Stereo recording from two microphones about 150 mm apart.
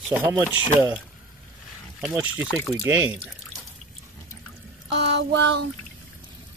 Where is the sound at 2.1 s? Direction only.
10° right (ahead or behind).